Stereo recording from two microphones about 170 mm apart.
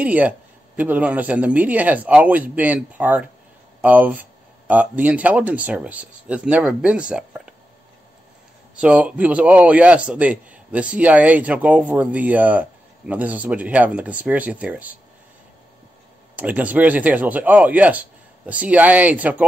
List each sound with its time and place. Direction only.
0.0 s a man's voice: 10° right (ahead or behind)
8.7 s a man's voice: 5° right (ahead or behind)
16.3 s a man's voice: 10° right (ahead or behind)